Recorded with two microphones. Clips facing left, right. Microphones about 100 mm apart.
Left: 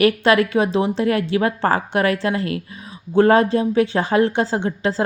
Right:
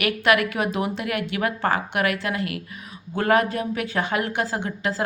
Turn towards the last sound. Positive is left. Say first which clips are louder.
# left 6 dB
turn(degrees=30)  # may be behind; listen again after turning